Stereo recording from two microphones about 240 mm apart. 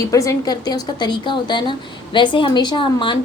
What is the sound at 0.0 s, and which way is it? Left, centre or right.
A woman's voice, centre.